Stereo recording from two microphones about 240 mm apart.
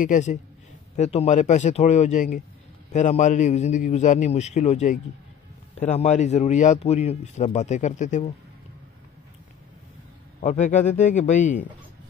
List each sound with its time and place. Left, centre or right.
0.0 s a man's voice: left
10.4 s a man's voice: left